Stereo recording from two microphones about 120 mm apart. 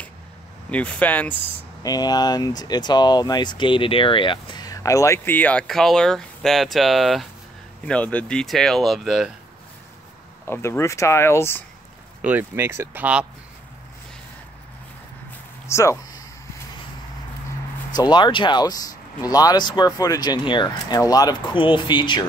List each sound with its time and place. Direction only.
0.7 s speech: 10° left (ahead or behind)
1.8 s speech: 35° left (ahead or behind); by 7.2 s centre (ahead or behind)
7.8 s speech: 10° left (ahead or behind)
10.4 s speech: 20° left (ahead or behind)
12.2 s speech: 15° right (ahead or behind)
15.6 s speech: 25° left (ahead or behind)
17.9 s speech: 35° left (ahead or behind)